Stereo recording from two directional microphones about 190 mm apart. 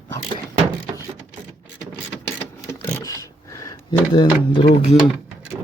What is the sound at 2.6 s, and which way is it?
Drawer open or close, 15° left (ahead or behind).